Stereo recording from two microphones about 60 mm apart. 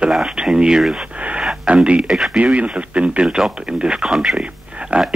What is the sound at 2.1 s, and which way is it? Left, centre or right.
Speech, centre.